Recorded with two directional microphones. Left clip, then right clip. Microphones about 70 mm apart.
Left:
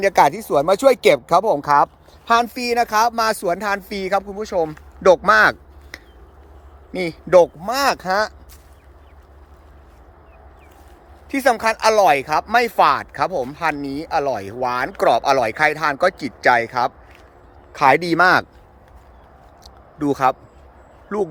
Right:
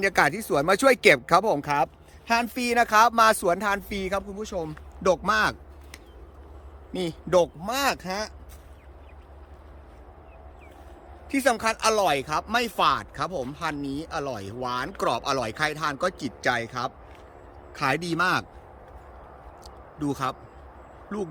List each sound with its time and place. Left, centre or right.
0.0 s speech: centre
1.6 s speech: right
2.3 s speech: centre
2.6 s speech: centre
4.2 s a man's voice: left
5.9 s finger snapping: centre
6.9 s speech: left
11.3 s a man's voice: left
17.7 s a man's voice: left
20.0 s a man's voice: left
21.1 s speech: left